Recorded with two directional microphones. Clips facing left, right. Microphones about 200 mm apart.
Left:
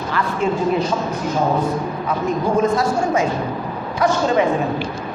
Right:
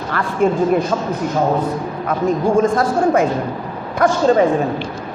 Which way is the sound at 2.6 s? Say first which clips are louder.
Right 2 dB; 55° right (ahead or behind).